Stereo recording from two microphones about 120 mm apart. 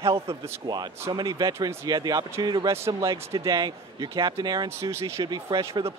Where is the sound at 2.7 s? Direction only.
25° right (ahead or behind).